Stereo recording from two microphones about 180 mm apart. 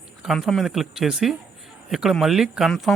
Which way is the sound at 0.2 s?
Centre (ahead or behind).